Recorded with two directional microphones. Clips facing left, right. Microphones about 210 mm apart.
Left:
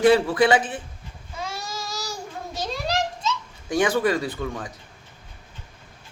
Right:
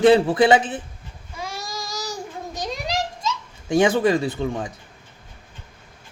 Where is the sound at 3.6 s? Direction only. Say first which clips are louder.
Right 4 dB; 25° right (ahead or behind).